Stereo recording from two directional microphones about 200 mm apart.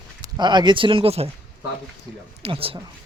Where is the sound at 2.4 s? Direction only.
30° right (ahead or behind).